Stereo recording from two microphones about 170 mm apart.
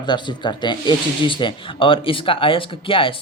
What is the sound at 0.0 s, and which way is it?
Speech, 25° left (ahead or behind).